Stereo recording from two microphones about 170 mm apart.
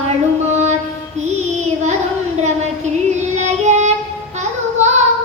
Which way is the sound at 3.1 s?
45° right (ahead or behind).